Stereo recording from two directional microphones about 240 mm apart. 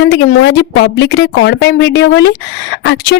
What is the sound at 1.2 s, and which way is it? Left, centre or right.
Speech, left.